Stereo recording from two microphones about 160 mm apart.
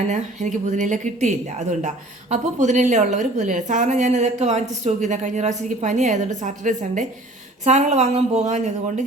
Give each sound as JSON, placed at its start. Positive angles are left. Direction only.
{"t": 0.1, "sound": "a woman's voice", "side_deg": -50}